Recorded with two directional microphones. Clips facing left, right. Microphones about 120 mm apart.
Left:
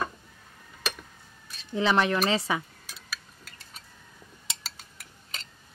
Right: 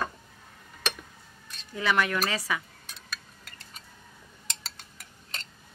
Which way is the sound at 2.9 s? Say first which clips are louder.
Left 1 dB; 5° left (ahead or behind).